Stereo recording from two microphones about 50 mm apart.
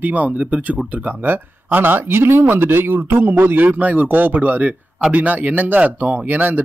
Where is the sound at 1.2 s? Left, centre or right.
Right.